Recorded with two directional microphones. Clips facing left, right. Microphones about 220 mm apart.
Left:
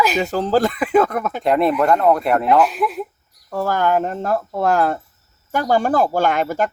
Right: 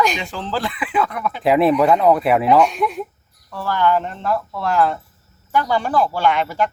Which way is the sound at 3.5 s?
45° left (ahead or behind).